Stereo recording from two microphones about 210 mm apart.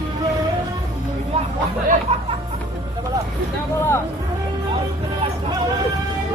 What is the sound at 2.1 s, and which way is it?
Music, 30° right (ahead or behind).